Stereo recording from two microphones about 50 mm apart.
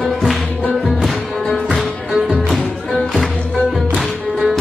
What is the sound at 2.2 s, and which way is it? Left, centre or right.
Music, centre.